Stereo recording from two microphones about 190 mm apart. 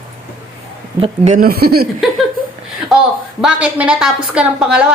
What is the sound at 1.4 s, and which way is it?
Speech, 55° right (ahead or behind).